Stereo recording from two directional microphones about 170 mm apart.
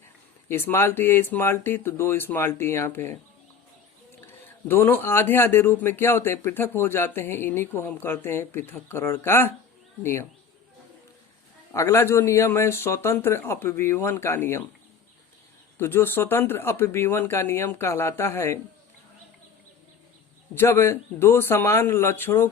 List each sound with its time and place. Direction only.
0.4 s speech: 15° left (ahead or behind)
4.3 s speech: 15° left (ahead or behind)
11.7 s speech: 15° left (ahead or behind)
15.8 s speech: 15° left (ahead or behind)
20.6 s speech: 15° left (ahead or behind)